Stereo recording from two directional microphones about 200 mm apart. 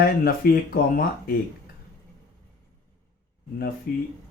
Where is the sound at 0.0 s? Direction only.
45° left (ahead or behind).